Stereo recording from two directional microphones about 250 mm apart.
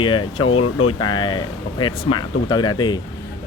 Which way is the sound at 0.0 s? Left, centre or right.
Centre.